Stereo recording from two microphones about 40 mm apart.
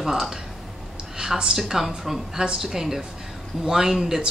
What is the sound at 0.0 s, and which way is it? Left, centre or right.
Speech, centre.